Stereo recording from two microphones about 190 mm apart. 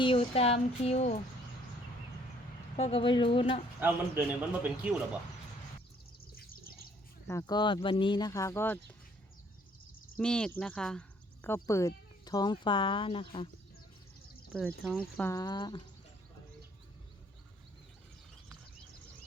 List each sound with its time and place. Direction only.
0.0 s speech: 30° left (ahead or behind)
2.7 s speech: 30° left (ahead or behind)
3.8 s speech: 10° right (ahead or behind)
6.3 s bird: 50° left (ahead or behind)
7.3 s speech: 20° left (ahead or behind)
10.2 s speech: 5° left (ahead or behind); by 13.5 s 30° left (ahead or behind)
14.5 s speech: 5° left (ahead or behind); by 15.8 s 25° left (ahead or behind)